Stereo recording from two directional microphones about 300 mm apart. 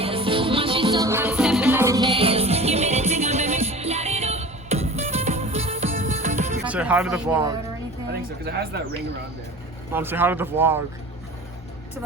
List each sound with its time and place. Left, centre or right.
0.0 s music: centre
6.7 s speech: centre
8.1 s speech: right
9.9 s speech: centre